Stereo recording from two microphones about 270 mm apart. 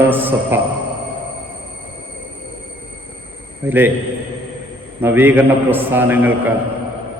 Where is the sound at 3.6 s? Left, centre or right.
Centre.